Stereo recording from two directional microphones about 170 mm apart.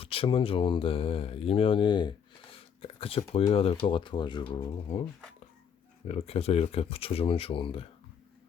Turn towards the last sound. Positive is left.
turn(degrees=30)  # may be behind; listen again after turning